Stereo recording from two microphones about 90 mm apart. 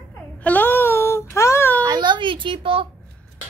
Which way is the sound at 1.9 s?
55° right (ahead or behind).